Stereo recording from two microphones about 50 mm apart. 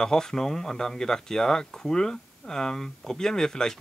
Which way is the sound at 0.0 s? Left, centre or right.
Centre.